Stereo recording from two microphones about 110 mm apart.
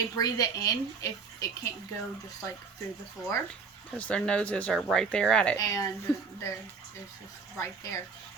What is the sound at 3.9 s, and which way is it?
Speech, 10° left (ahead or behind).